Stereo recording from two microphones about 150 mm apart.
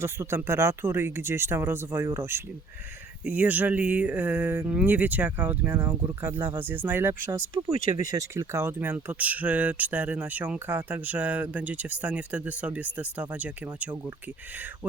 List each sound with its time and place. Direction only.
0.0 s speech: 15° right (ahead or behind)